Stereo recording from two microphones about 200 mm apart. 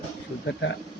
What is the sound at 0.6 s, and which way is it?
Speech, 65° left (ahead or behind).